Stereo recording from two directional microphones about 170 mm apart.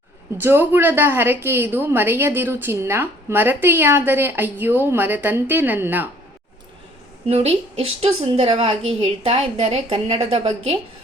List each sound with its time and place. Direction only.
0.3 s a woman's voice: 10° right (ahead or behind)
7.3 s a woman's voice: 35° right (ahead or behind)